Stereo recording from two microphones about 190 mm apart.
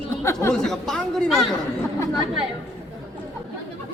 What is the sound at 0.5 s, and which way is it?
Speech, 5° left (ahead or behind).